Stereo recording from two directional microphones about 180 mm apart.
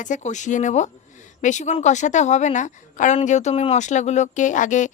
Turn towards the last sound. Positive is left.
turn(degrees=45)  # may be behind; listen again after turning